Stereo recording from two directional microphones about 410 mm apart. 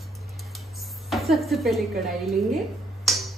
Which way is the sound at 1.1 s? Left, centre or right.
Centre.